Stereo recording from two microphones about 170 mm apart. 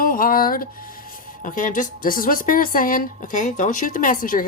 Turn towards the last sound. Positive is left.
turn(degrees=55)  # may be behind; listen again after turning